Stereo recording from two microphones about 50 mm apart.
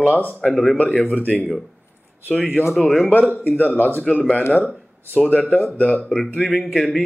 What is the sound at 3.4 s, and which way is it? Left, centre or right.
Speech, left.